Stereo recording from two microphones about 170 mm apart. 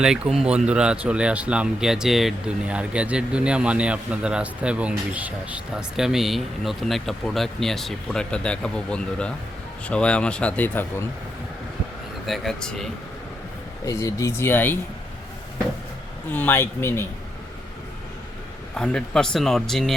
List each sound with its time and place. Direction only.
0.0 s speech: 5° right (ahead or behind)
12.2 s speech: centre (ahead or behind)
13.8 s speech: 20° left (ahead or behind)
16.3 s speech: 10° left (ahead or behind)
18.8 s speech: 5° left (ahead or behind)